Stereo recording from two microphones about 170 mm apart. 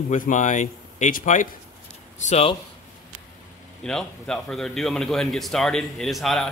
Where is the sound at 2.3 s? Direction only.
35° left (ahead or behind).